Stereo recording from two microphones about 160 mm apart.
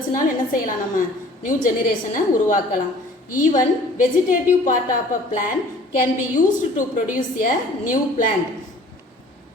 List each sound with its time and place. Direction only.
0.1 s a woman's voice: 60° left (ahead or behind)